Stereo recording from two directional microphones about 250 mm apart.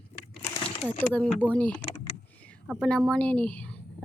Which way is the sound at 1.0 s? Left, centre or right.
Centre.